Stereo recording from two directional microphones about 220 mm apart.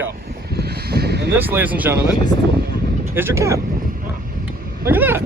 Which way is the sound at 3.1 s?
10° right (ahead or behind).